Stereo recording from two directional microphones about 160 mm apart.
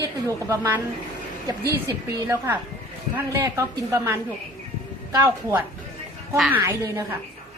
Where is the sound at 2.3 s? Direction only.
15° right (ahead or behind).